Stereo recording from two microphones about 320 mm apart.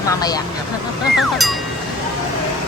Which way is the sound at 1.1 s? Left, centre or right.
Centre.